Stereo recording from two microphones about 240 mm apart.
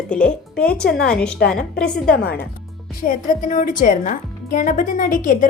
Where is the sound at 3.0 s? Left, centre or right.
Left.